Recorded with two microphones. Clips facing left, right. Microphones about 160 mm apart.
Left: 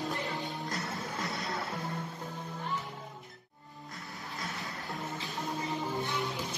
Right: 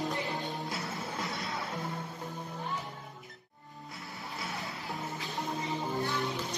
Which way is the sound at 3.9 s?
Centre (ahead or behind).